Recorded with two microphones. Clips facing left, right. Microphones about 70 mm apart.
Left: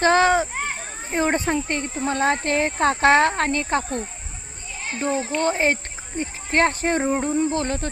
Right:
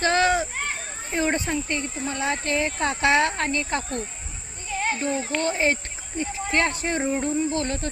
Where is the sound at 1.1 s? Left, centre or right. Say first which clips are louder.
Left 3 dB; left.